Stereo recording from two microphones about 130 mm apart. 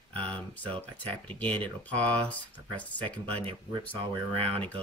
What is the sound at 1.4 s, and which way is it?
Speech, 10° left (ahead or behind).